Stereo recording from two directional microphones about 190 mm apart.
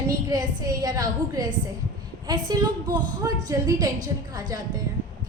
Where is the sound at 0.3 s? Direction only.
20° right (ahead or behind).